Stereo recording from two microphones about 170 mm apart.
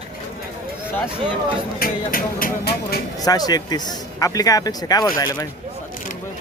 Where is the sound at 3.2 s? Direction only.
20° left (ahead or behind).